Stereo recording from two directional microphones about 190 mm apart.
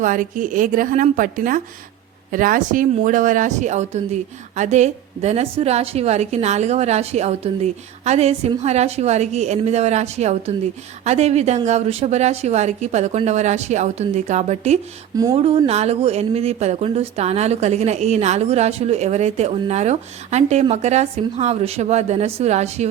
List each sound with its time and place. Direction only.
0.0 s a woman's voice: 45° right (ahead or behind)
15.1 s speech: 20° right (ahead or behind)
15.4 s speech: 30° right (ahead or behind)